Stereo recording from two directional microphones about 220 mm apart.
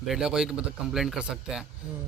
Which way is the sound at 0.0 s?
Centre (ahead or behind).